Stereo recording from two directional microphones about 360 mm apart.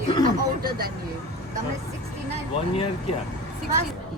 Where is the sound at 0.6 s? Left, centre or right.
Right.